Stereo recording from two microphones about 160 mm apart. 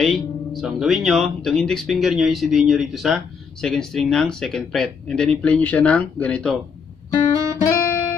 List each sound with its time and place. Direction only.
0.0 s speech: centre (ahead or behind)
7.6 s music: 15° left (ahead or behind)